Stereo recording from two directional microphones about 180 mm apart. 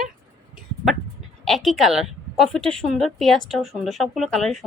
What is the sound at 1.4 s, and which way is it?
A woman's voice, centre (ahead or behind).